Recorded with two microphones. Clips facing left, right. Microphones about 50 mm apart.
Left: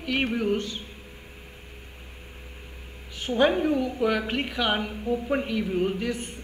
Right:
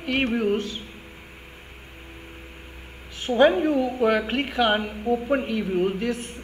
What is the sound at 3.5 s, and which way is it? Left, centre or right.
Speech, centre.